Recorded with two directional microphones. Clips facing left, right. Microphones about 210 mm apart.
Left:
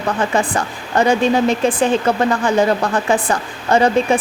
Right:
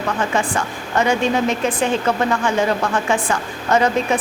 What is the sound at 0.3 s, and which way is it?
A woman's voice, 35° left (ahead or behind).